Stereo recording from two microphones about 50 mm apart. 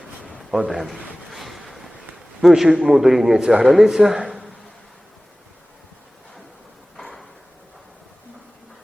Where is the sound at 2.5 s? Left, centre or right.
Centre.